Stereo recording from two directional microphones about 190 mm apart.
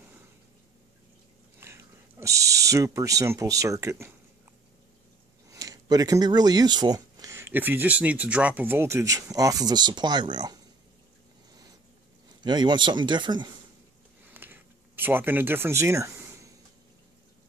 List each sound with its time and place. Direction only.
1.6 s speech: 15° right (ahead or behind)
5.5 s speech: 20° right (ahead or behind)
12.4 s speech: 25° right (ahead or behind)
14.3 s a sound: 10° right (ahead or behind)